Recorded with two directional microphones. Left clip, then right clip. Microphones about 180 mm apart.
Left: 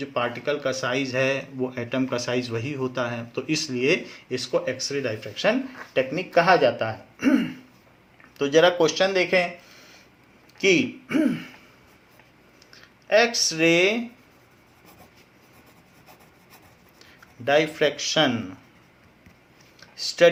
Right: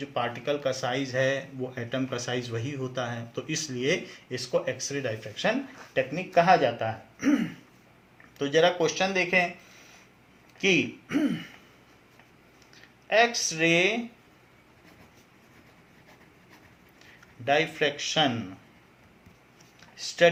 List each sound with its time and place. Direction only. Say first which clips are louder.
0.0 s speech: left 4 dB; 35° left (ahead or behind)
10.6 s a man's voice: left 4 dB; 50° left (ahead or behind)
12.7 s speech: left 4 dB; 50° left (ahead or behind)
17.4 s speech: left 4 dB; 50° left (ahead or behind)
20.0 s speech: left 4 dB; 50° left (ahead or behind)